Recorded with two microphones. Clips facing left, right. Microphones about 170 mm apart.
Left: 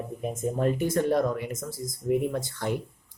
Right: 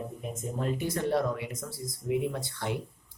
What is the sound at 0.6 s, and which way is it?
Speech, 50° left (ahead or behind).